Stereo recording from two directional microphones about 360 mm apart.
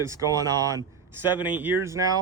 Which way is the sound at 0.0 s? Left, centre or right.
Centre.